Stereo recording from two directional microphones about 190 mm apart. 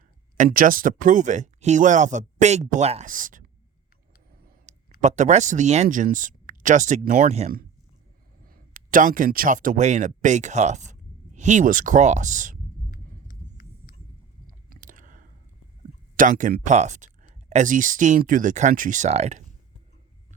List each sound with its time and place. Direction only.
0.3 s speech: 45° right (ahead or behind)
4.7 s a sound: 40° right (ahead or behind)
5.0 s speech: 40° right (ahead or behind)
8.4 s speech: 45° right (ahead or behind)
12.9 s a sound: 50° left (ahead or behind)
14.4 s chewing: 45° right (ahead or behind)
16.1 s speech: 45° right (ahead or behind)